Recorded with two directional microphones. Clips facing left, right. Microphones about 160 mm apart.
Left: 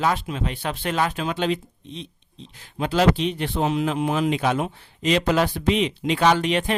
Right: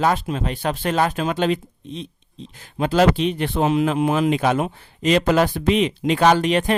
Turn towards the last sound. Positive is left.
turn(degrees=-45)  # may be behind; listen again after turning